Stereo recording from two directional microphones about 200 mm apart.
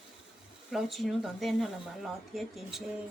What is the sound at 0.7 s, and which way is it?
Speech, centre (ahead or behind).